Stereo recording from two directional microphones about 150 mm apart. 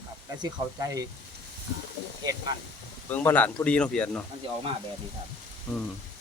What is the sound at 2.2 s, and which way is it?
Sizzle, 25° right (ahead or behind).